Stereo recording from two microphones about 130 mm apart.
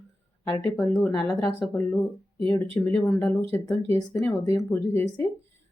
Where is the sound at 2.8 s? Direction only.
15° left (ahead or behind).